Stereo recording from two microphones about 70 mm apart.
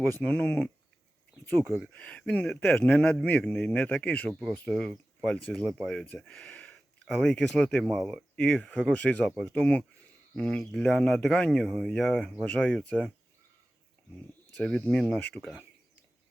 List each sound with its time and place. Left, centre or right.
0.2 s speech: centre
1.6 s speech: centre
1.9 s speech: centre
4.6 s speech: centre
10.9 s speech: centre
11.9 s speech: centre
12.5 s speech: left
14.6 s speech: centre